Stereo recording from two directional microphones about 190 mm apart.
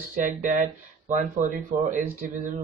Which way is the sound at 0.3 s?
40° right (ahead or behind).